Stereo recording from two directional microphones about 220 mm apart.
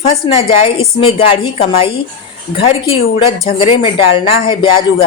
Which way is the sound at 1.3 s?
25° left (ahead or behind).